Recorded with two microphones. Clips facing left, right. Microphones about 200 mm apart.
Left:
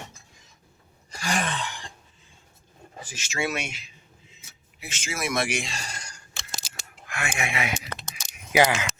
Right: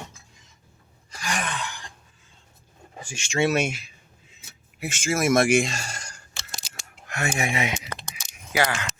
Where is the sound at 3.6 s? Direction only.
45° right (ahead or behind).